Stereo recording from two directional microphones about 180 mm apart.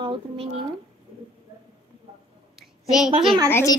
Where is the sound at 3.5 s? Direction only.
20° left (ahead or behind).